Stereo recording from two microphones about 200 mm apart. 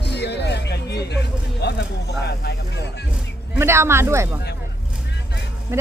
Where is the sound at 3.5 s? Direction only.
10° right (ahead or behind).